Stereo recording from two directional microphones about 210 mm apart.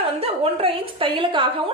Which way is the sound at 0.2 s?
25° right (ahead or behind).